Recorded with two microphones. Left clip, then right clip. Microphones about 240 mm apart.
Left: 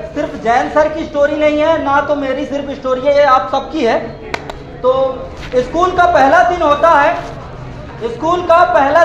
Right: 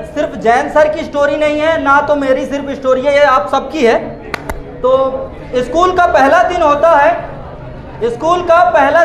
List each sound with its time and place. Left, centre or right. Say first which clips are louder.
0.1 s a man's voice: right 3 dB; right
5.5 s a man's voice: right 1 dB; right